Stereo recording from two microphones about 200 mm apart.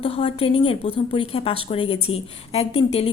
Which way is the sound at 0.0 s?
30° left (ahead or behind).